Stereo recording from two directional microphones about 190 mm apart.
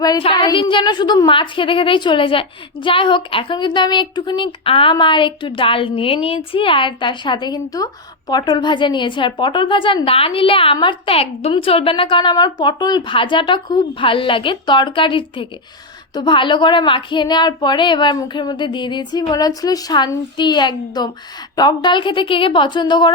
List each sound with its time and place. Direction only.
0.0 s a woman's voice: 25° left (ahead or behind)